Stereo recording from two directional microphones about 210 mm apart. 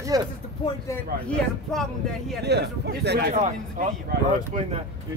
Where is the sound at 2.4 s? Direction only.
50° right (ahead or behind).